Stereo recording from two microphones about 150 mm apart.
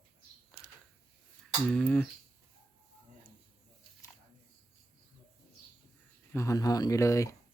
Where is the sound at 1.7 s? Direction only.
5° left (ahead or behind).